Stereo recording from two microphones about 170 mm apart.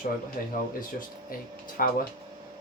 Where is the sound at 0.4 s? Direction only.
50° left (ahead or behind).